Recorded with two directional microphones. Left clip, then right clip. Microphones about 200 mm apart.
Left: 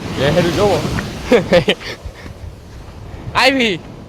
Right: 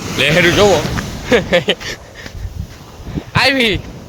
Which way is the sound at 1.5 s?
30° left (ahead or behind).